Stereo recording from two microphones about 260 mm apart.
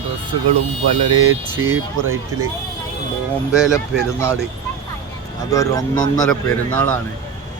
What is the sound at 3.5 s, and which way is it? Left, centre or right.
Speech, centre.